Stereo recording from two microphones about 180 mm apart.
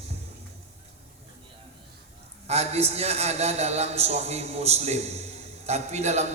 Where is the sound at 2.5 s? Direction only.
35° right (ahead or behind).